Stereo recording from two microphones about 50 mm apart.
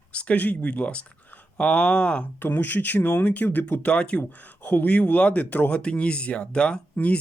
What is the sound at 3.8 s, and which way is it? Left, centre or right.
Speech, left.